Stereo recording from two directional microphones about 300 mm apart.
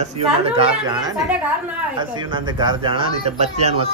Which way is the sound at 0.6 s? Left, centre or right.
Centre.